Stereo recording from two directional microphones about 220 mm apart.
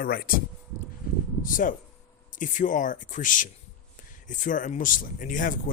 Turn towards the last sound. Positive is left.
turn(degrees=40)  # may be behind; listen again after turning